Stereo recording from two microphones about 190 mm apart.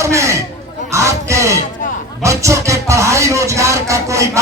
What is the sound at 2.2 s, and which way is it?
Music, 15° right (ahead or behind).